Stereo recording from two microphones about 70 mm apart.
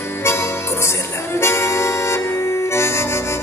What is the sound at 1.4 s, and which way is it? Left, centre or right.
Music, left.